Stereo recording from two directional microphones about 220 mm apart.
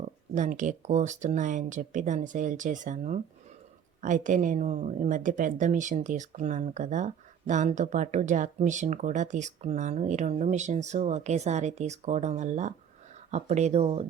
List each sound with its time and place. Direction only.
0.3 s a woman's voice: 35° right (ahead or behind)